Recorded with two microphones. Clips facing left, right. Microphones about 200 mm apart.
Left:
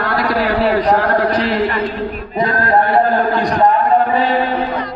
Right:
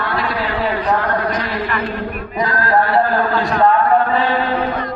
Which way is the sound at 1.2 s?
30° left (ahead or behind).